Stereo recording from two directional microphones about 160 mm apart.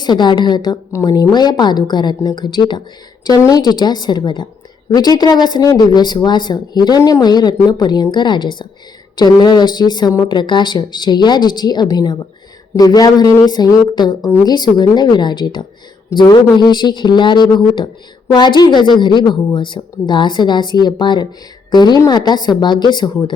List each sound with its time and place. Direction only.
0.0 s speech: 25° left (ahead or behind)